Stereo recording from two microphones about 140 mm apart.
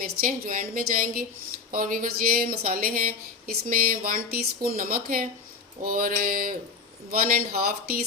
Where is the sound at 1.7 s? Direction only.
75° right (ahead or behind); by 8.0 s 90° right.